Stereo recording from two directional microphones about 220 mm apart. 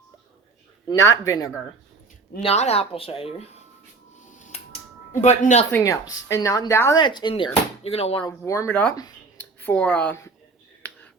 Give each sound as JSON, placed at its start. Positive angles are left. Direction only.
{"t": 0.9, "sound": "speech", "side_deg": 15}
{"t": 2.4, "sound": "speech", "side_deg": 30}
{"t": 4.4, "sound": "finger snapping", "side_deg": 30}
{"t": 5.2, "sound": "speech", "side_deg": 35}
{"t": 5.7, "sound": "speech", "side_deg": 15}
{"t": 8.4, "sound": "speech", "side_deg": 10}